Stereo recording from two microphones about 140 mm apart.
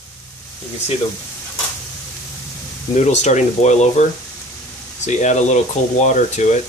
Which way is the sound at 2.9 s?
55° left (ahead or behind).